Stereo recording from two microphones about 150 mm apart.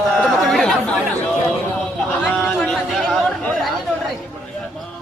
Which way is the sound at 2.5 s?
Centre (ahead or behind).